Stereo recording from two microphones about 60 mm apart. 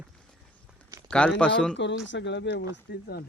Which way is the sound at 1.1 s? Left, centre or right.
Centre.